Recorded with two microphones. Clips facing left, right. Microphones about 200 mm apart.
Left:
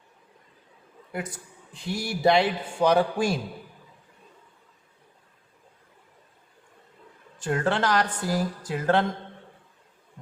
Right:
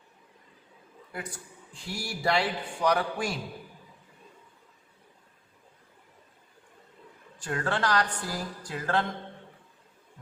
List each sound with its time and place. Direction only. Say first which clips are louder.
1.1 s a man's voice: left 5 dB; 20° left (ahead or behind)
7.3 s a man's voice: left 5 dB; 25° left (ahead or behind)